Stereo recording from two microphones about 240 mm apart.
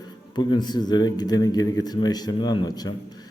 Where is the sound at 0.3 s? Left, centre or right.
Centre.